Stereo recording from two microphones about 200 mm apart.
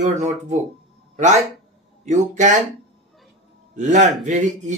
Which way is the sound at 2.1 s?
35° right (ahead or behind).